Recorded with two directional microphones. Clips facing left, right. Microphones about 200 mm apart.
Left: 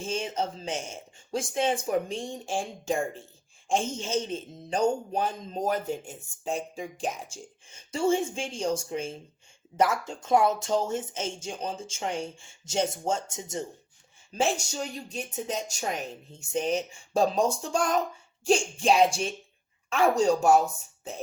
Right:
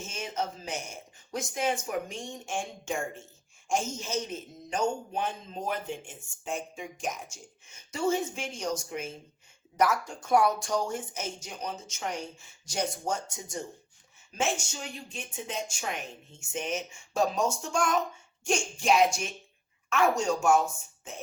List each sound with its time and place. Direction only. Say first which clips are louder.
0.0 s a man's voice: left 4 dB; 30° left (ahead or behind)
14.3 s a man's voice: left 4 dB; 35° left (ahead or behind)